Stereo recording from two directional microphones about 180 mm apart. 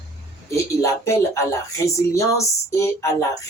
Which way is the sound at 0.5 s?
15° left (ahead or behind).